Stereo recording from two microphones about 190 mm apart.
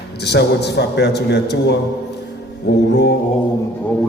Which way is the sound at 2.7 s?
65° left (ahead or behind).